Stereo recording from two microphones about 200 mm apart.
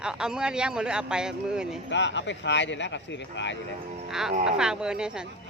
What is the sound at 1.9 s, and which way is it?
Speech, 65° left (ahead or behind).